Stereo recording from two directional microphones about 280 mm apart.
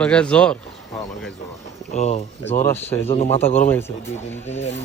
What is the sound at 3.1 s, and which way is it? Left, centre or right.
Speech, left.